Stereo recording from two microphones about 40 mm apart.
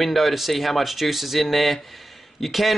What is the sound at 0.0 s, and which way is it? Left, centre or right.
Speech, centre.